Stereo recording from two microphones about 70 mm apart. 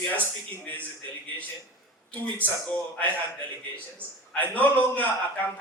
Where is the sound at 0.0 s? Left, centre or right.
Left.